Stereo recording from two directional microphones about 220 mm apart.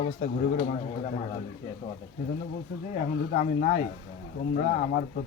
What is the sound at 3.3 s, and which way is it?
Speech, 35° left (ahead or behind).